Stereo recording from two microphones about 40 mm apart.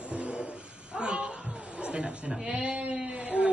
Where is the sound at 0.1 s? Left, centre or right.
Right.